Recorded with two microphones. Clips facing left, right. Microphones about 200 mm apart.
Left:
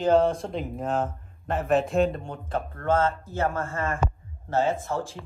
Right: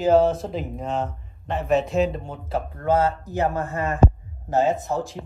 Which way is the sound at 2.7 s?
15° right (ahead or behind).